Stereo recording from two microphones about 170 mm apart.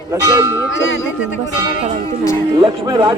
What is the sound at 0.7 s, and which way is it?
Speech, 90° left.